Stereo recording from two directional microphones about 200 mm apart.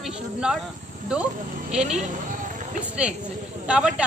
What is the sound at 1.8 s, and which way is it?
Speech, 35° right (ahead or behind).